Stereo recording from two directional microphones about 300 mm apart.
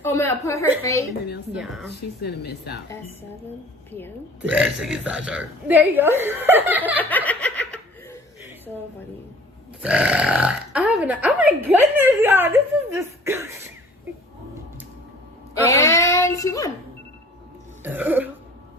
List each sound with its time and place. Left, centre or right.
0.0 s a woman's voice: centre
2.2 s speech: left
4.4 s speech: centre
7.0 s snicker: centre
9.8 s speech: centre
12.9 s cough: centre
15.6 s speech: centre
17.8 s cough: centre